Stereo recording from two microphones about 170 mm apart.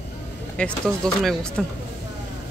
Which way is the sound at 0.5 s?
5° left (ahead or behind).